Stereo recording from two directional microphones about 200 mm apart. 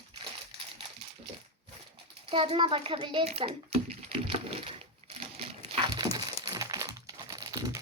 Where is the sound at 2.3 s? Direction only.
25° right (ahead or behind).